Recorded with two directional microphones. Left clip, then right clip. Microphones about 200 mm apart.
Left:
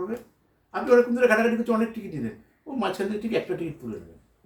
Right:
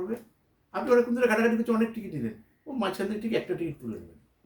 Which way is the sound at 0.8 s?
20° right (ahead or behind).